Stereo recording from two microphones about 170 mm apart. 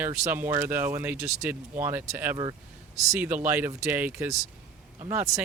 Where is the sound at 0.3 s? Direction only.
10° right (ahead or behind).